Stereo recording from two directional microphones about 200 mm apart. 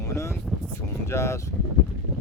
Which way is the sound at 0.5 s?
Centre (ahead or behind).